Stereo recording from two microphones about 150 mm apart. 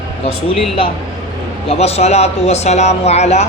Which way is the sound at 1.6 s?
40° left (ahead or behind).